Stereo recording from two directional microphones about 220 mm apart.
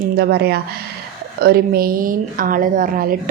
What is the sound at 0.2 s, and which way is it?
A woman's voice, 45° right (ahead or behind).